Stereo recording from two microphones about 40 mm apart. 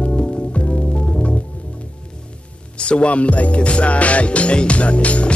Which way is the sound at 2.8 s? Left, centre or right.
Left.